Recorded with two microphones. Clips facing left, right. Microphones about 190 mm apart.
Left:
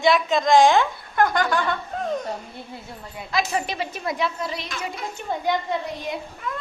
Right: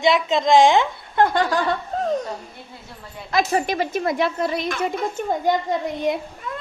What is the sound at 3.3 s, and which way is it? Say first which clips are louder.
A woman's voice: right 5 dB; 50° right (ahead or behind).